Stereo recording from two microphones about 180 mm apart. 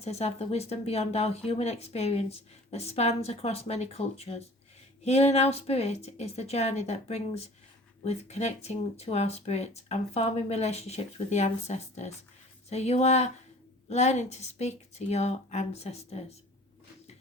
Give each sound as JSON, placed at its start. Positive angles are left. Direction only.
{"t": 0.0, "sound": "speech", "side_deg": 35}